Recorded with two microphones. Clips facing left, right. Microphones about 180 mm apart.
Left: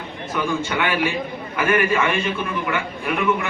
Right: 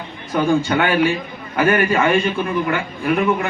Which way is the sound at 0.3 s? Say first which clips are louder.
Right 6 dB; 35° right (ahead or behind).